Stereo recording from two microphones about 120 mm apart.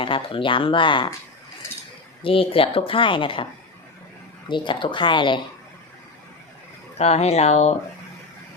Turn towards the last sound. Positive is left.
turn(degrees=65)  # may be behind; listen again after turning